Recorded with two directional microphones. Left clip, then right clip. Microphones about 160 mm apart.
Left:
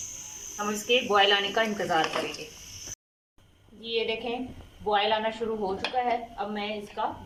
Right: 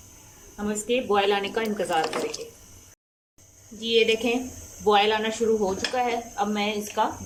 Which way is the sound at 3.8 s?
10° right (ahead or behind).